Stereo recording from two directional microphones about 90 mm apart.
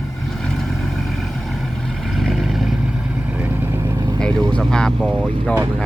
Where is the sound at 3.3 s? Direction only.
15° right (ahead or behind).